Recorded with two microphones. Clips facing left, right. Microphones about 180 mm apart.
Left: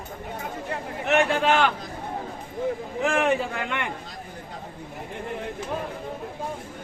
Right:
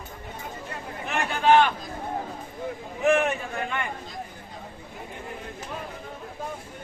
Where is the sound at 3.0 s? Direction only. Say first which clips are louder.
Right 1 dB; 90° left.